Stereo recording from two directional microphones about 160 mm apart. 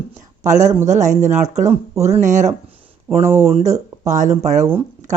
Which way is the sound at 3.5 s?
40° right (ahead or behind).